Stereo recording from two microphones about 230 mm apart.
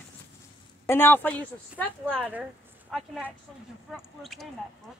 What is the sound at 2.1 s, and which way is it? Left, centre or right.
Speech, centre.